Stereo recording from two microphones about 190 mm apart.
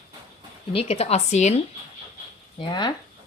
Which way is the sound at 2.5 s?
25° left (ahead or behind).